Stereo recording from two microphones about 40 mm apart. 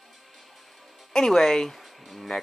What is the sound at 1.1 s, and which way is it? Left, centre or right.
Speech, centre.